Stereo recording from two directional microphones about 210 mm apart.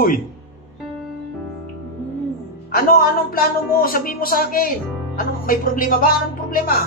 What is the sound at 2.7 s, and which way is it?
Speech, 45° left (ahead or behind).